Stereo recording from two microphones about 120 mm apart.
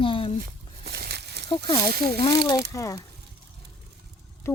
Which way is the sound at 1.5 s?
50° left (ahead or behind).